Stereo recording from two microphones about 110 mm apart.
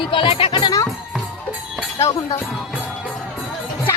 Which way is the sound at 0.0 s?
50° left (ahead or behind).